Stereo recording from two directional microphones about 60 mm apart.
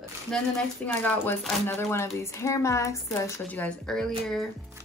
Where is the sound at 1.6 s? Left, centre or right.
Left.